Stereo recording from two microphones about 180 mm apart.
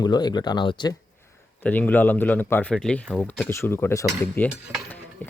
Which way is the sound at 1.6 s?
10° left (ahead or behind).